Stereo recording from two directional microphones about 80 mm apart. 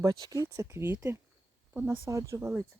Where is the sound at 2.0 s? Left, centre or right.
Right.